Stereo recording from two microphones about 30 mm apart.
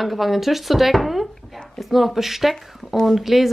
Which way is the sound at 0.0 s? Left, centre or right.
Centre.